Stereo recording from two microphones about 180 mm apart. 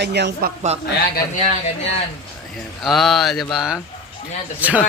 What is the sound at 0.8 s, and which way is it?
Speech, 65° left (ahead or behind).